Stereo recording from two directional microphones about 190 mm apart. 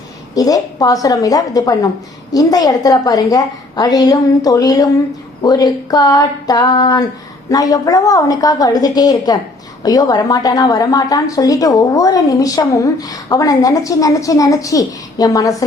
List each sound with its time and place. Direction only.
0.3 s a woman's voice: 20° left (ahead or behind)